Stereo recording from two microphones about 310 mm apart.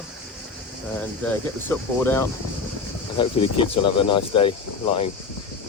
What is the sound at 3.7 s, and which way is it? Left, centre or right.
Speech, centre.